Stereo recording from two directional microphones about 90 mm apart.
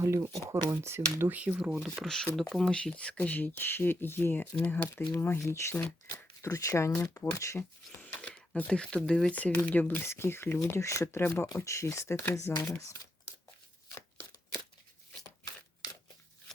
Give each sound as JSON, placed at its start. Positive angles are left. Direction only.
{"t": 0.0, "sound": "speech", "side_deg": -35}
{"t": 1.8, "sound": "speech", "side_deg": 0}
{"t": 8.0, "sound": "speech", "side_deg": 15}